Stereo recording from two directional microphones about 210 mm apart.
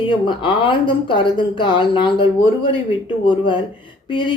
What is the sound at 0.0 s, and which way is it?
Speech, 25° left (ahead or behind).